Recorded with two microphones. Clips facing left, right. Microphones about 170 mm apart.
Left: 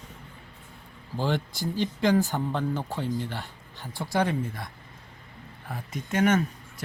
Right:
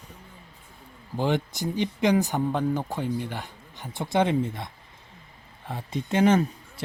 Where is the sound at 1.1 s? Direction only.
15° right (ahead or behind).